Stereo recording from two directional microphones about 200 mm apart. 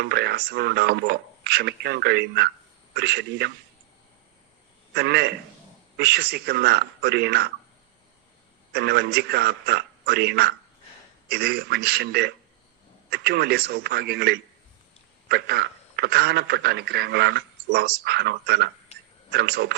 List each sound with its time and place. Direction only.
0.0 s speech: 55° right (ahead or behind)
4.9 s speech: 55° right (ahead or behind)
8.7 s speech: 55° right (ahead or behind)